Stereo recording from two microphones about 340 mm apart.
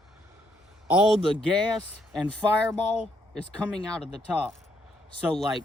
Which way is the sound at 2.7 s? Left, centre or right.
Centre.